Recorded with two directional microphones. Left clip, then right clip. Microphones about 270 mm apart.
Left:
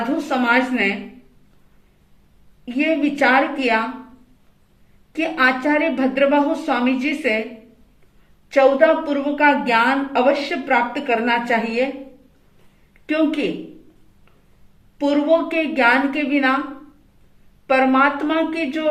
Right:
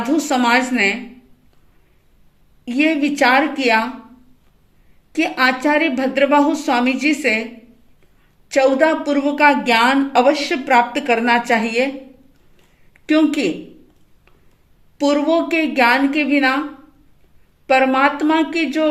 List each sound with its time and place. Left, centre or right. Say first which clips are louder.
0.3 s a woman's voice: right 1 dB; right
2.6 s a woman's voice: right 2 dB; right
5.1 s a woman's voice: right 1 dB; right
8.4 s a woman's voice: left 1 dB; right
12.9 s a woman's voice: right 4 dB; right
14.9 s a woman's voice: right 1 dB; right
17.7 s a woman's voice: right 2 dB; right